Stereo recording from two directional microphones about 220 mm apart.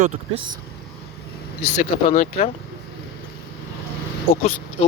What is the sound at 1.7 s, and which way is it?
Speech, 35° left (ahead or behind).